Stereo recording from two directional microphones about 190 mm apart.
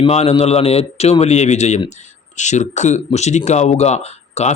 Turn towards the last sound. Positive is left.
turn(degrees=35)  # may be behind; listen again after turning